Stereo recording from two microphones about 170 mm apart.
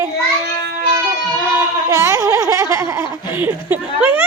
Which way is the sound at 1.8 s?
15° right (ahead or behind).